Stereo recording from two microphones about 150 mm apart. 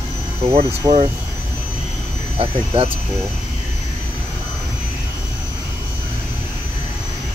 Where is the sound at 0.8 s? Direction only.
30° right (ahead or behind).